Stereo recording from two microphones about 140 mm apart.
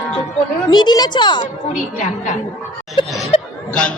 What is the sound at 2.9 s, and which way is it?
Laughter, 40° left (ahead or behind).